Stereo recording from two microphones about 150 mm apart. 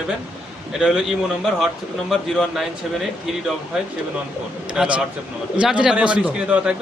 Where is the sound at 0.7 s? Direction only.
5° right (ahead or behind).